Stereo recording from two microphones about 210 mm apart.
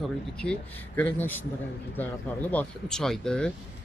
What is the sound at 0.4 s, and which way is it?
Speech, 5° left (ahead or behind).